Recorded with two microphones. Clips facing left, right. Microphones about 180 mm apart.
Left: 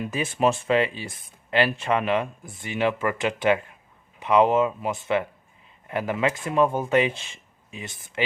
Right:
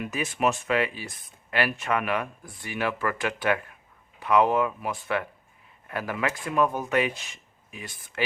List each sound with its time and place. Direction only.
0.0 s speech: 30° left (ahead or behind)